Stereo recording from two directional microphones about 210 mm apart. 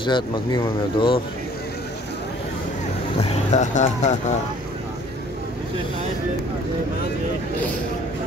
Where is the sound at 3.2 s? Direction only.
30° left (ahead or behind).